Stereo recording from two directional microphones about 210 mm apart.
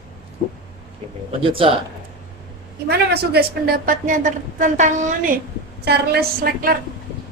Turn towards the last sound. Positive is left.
turn(degrees=-45)  # may be behind; listen again after turning